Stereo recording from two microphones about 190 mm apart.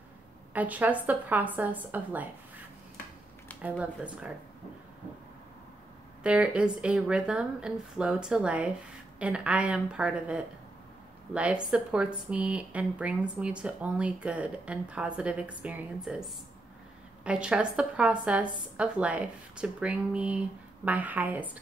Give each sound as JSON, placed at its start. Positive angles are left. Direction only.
{"t": 0.5, "sound": "a woman's voice", "side_deg": -10}
{"t": 3.8, "sound": "a woman's voice", "side_deg": -5}
{"t": 6.2, "sound": "a woman's voice", "side_deg": -5}